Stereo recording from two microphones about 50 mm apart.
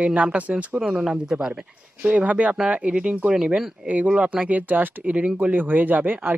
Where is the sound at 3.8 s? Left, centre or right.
Right.